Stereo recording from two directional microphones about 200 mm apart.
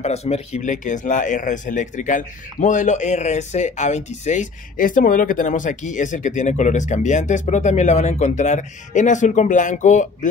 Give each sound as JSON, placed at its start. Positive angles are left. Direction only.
{"t": 0.0, "sound": "speech", "side_deg": 30}